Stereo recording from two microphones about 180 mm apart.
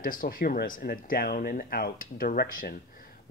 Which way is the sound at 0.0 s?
50° left (ahead or behind).